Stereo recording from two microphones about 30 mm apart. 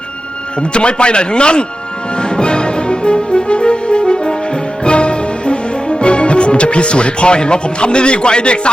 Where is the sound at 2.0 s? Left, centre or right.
Left.